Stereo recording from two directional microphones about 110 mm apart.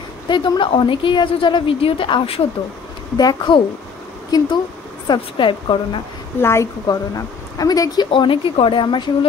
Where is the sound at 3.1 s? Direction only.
40° left (ahead or behind).